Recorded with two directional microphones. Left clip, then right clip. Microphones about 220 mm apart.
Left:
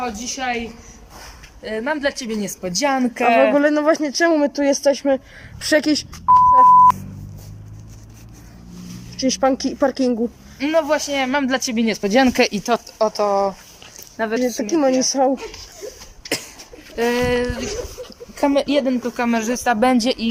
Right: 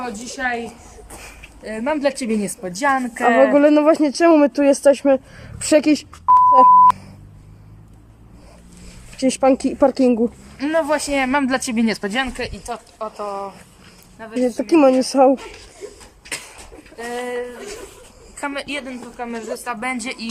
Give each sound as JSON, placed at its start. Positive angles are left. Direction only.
{"t": 0.0, "sound": "speech", "side_deg": 0}
{"t": 1.6, "sound": "speech", "side_deg": -5}
{"t": 2.6, "sound": "speech", "side_deg": 5}
{"t": 3.5, "sound": "speech", "side_deg": -10}
{"t": 9.2, "sound": "speech", "side_deg": -5}
{"t": 12.3, "sound": "speech", "side_deg": 55}
{"t": 13.0, "sound": "speech", "side_deg": 20}
{"t": 14.4, "sound": "speech", "side_deg": -5}
{"t": 17.1, "sound": "a sound", "side_deg": 55}
{"t": 18.3, "sound": "speech", "side_deg": 25}
{"t": 19.1, "sound": "speech", "side_deg": 55}